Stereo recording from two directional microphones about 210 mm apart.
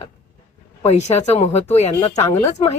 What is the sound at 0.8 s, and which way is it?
Speech, 30° left (ahead or behind).